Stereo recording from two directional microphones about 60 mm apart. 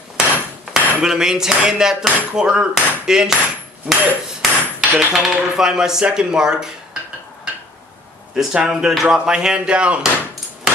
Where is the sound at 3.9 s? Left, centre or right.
Right.